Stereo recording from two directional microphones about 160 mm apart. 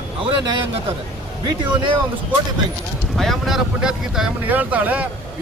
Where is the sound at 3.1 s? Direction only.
Centre (ahead or behind).